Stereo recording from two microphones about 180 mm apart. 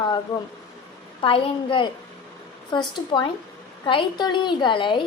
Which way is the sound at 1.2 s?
30° left (ahead or behind).